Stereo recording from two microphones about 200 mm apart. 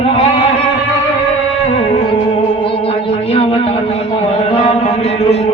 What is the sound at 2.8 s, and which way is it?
Music, 30° left (ahead or behind).